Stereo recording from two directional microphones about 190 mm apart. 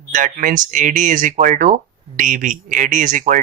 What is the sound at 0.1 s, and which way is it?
Speech, 45° right (ahead or behind).